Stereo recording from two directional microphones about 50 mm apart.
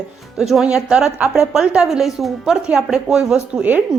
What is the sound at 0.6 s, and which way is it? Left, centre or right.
A woman's voice, centre.